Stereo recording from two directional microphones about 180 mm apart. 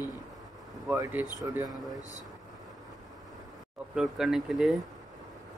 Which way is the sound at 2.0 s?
20° left (ahead or behind).